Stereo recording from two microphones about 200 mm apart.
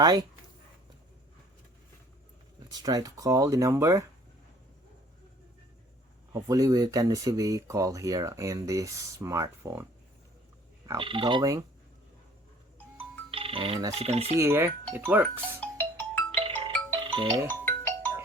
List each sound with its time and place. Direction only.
0.0 s speech: 20° right (ahead or behind)
2.8 s speech: 20° right (ahead or behind)
6.3 s speech: 15° right (ahead or behind)
10.8 s speech: 25° right (ahead or behind)
13.3 s speech: 30° right (ahead or behind)
14.3 s speech: 10° right (ahead or behind)
15.6 s music: 5° left (ahead or behind)
16.4 s music: 25° right (ahead or behind)
17.5 s music: 10° left (ahead or behind)